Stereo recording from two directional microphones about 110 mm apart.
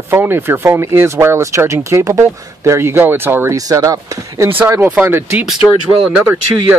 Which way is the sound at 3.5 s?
30° right (ahead or behind).